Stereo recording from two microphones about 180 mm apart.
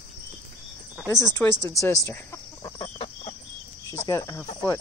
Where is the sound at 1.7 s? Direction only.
20° left (ahead or behind).